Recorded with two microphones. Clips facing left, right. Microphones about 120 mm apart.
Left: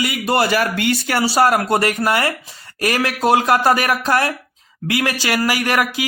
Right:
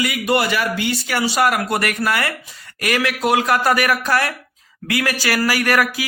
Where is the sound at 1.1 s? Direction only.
35° left (ahead or behind).